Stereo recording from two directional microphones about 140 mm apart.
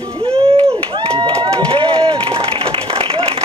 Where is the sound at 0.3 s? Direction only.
40° right (ahead or behind).